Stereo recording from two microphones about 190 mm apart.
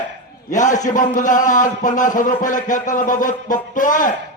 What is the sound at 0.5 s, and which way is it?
A man's voice, 40° left (ahead or behind).